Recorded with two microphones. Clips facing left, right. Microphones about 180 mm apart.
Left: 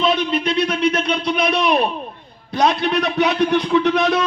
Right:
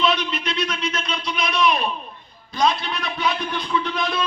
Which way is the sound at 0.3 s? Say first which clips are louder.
Left 7 dB; 55° left (ahead or behind).